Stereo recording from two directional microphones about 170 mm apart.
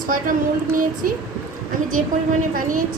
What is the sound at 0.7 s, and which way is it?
Speech, 55° right (ahead or behind).